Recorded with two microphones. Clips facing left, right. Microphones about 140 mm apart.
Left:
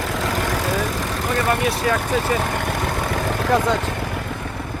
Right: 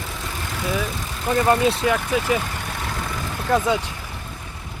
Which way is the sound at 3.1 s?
75° left (ahead or behind).